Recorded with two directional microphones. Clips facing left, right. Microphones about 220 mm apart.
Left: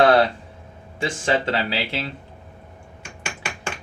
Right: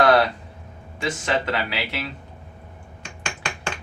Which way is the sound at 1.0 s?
30° left (ahead or behind).